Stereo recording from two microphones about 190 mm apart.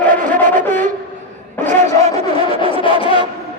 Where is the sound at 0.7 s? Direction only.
40° right (ahead or behind).